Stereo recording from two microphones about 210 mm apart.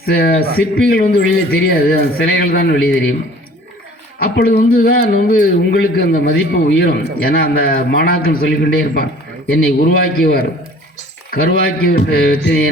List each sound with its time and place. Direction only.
0.0 s speech: 45° left (ahead or behind)
4.2 s speech: 45° left (ahead or behind)